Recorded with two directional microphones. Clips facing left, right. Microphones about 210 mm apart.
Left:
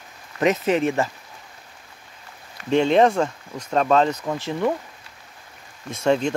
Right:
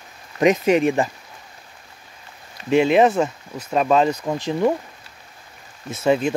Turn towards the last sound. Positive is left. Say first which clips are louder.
# right 1 dB
turn(degrees=-5)  # may be behind; listen again after turning